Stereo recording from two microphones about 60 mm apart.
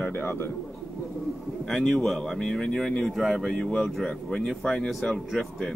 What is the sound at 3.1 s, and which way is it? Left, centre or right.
Speech, centre.